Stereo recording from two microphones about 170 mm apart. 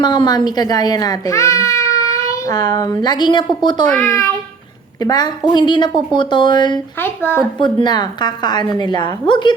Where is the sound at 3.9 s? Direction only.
10° left (ahead or behind).